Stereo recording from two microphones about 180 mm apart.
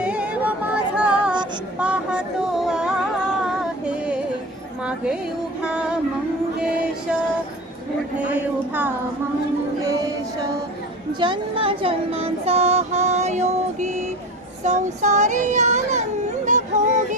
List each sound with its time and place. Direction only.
0.0 s music: 5° right (ahead or behind)
1.8 s a sound: 5° right (ahead or behind)
3.4 s music: 5° right (ahead or behind)
5.6 s music: 5° right (ahead or behind)
8.3 s a sound: 10° right (ahead or behind)
11.2 s speech: 30° right (ahead or behind)
14.6 s child singing: 40° right (ahead or behind)
16.5 s music: 40° right (ahead or behind)